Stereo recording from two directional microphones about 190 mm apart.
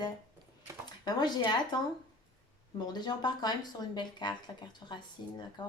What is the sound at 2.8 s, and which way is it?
Speech, 25° left (ahead or behind).